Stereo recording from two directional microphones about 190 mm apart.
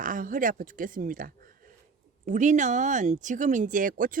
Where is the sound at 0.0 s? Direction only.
45° right (ahead or behind).